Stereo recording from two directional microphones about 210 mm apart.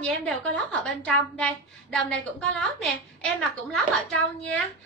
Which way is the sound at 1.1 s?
5° left (ahead or behind).